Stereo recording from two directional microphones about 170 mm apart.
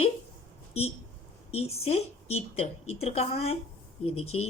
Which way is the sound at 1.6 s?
40° left (ahead or behind).